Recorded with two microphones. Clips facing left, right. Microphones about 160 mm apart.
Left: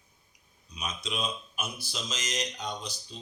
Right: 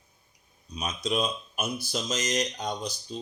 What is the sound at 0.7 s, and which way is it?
Speech, 40° right (ahead or behind).